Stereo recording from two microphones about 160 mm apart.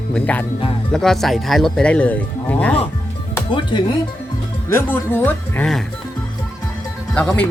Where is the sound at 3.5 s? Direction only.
30° left (ahead or behind).